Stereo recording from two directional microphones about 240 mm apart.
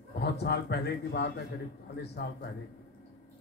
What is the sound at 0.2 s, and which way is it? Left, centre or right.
A man's voice, left.